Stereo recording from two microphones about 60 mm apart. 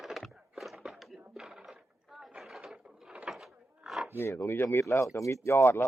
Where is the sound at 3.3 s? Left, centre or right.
Centre.